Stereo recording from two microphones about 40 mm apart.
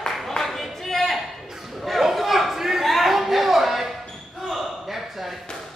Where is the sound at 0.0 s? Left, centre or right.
Centre.